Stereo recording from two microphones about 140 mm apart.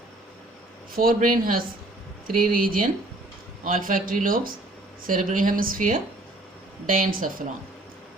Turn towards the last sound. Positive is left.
turn(degrees=-80)